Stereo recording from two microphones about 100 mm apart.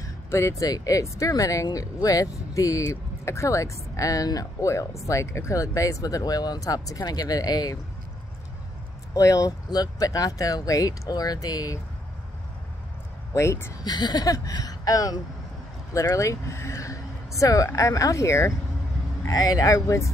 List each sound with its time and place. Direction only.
0.0 s speech: 30° left (ahead or behind)
9.1 s speech: 35° left (ahead or behind)
13.3 s speech: 30° left (ahead or behind)
13.8 s speech: 45° left (ahead or behind)